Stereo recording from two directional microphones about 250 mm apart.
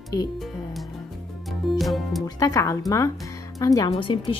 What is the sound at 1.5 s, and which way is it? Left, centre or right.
Music, centre.